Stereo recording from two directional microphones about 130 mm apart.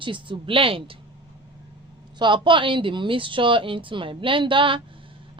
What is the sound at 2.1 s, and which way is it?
A woman's voice, 35° right (ahead or behind).